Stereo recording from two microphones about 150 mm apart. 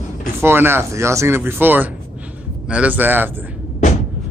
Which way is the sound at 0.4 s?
15° right (ahead or behind).